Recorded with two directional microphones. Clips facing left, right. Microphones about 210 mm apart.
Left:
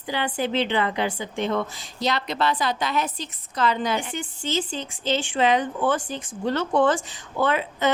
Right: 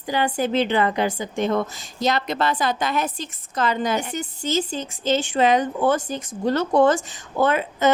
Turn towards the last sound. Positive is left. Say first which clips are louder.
# right 3 dB
turn(degrees=-45)  # may be behind; listen again after turning